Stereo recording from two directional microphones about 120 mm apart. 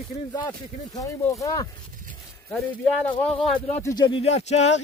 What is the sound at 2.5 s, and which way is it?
Speech, 10° left (ahead or behind).